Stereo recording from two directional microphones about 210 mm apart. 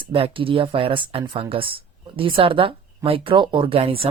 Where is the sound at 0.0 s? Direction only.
25° right (ahead or behind).